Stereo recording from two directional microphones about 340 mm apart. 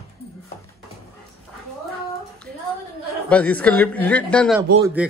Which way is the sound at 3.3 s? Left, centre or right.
Centre.